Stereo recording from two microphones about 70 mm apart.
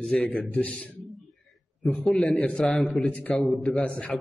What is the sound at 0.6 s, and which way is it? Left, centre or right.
Speech, centre.